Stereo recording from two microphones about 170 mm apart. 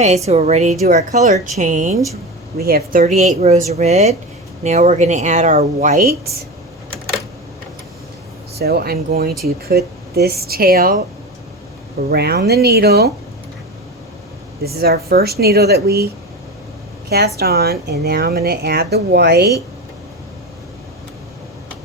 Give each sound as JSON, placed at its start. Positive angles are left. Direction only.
{"t": 0.3, "sound": "speech", "side_deg": -40}
{"t": 2.6, "sound": "speech", "side_deg": -60}
{"t": 3.0, "sound": "speech", "side_deg": -45}
{"t": 8.5, "sound": "speech", "side_deg": -65}
{"t": 12.1, "sound": "speech", "side_deg": -70}
{"t": 14.6, "sound": "speech", "side_deg": -65}
{"t": 17.1, "sound": "speech", "side_deg": -70}